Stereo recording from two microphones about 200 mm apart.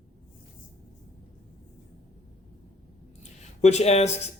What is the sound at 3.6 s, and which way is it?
Speech, 35° left (ahead or behind).